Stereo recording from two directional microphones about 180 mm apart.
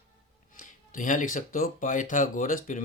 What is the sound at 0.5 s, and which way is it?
Speech, 50° left (ahead or behind).